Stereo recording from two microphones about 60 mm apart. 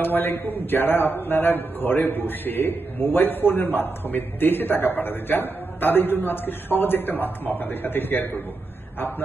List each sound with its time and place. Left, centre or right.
0.0 s a man's voice: left